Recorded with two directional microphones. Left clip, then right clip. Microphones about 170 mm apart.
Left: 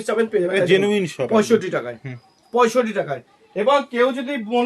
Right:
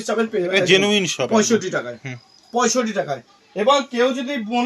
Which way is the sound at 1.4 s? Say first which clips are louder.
Left 4 dB; 25° left (ahead or behind).